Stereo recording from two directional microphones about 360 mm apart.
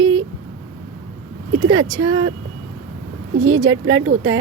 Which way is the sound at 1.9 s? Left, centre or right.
Right.